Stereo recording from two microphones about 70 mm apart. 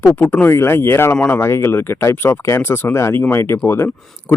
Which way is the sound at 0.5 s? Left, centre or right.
Left.